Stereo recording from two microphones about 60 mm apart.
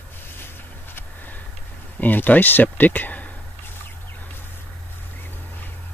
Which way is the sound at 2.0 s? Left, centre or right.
Left.